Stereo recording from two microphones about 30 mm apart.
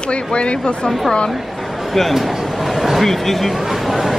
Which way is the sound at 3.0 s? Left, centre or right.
Centre.